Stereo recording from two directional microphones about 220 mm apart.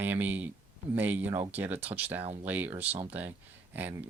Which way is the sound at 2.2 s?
25° right (ahead or behind).